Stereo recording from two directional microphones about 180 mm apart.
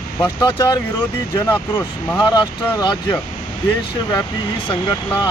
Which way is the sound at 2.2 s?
25° left (ahead or behind).